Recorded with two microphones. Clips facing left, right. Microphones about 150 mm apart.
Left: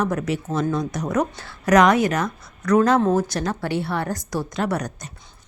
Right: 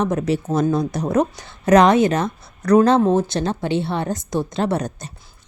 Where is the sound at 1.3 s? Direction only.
20° right (ahead or behind).